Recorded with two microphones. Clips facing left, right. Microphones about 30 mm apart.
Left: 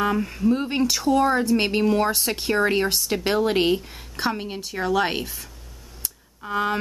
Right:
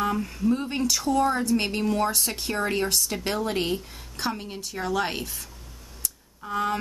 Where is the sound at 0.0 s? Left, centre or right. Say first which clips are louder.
Left 3 dB; centre.